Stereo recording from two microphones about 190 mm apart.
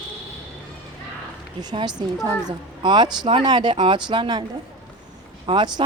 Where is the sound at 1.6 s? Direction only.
20° right (ahead or behind).